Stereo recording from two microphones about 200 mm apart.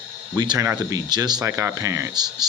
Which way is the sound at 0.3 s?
20° right (ahead or behind).